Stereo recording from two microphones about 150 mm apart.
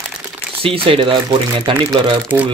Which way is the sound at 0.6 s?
35° right (ahead or behind).